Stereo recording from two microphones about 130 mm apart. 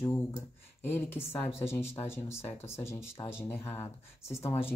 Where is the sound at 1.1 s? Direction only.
15° left (ahead or behind).